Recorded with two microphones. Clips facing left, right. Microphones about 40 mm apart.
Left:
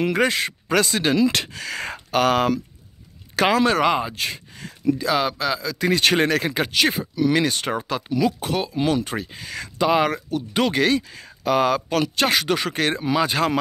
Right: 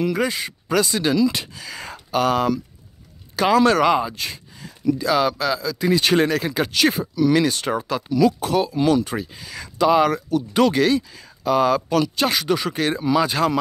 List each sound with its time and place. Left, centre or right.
0.0 s speech: left
0.7 s speech: left
1.3 s speech: left
3.6 s speech: left
4.1 s speech: left
5.8 s speech: left
6.5 s speech: left
9.8 s speech: left
13.0 s speech: left